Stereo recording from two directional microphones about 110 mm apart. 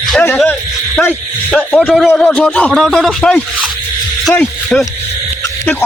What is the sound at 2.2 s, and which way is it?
A man's voice, 10° left (ahead or behind).